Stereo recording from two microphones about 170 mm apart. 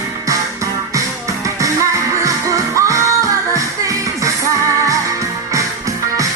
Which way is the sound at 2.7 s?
15° right (ahead or behind).